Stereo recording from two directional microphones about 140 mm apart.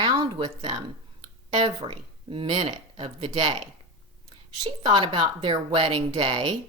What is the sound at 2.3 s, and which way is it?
Speech, 35° right (ahead or behind).